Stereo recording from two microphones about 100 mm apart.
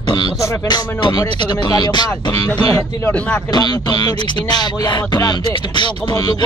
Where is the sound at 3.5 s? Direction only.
45° left (ahead or behind).